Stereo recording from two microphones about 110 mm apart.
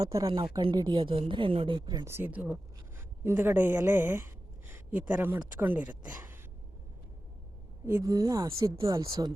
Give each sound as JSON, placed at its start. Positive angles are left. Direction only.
{"t": 0.0, "sound": "speech", "side_deg": -30}
{"t": 0.6, "sound": "a woman's voice", "side_deg": -40}
{"t": 2.0, "sound": "a woman's voice", "side_deg": -20}
{"t": 7.9, "sound": "speech", "side_deg": -20}
{"t": 8.1, "sound": "speech", "side_deg": -35}